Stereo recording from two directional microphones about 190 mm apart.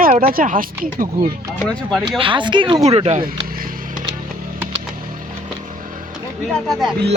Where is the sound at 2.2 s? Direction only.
25° right (ahead or behind).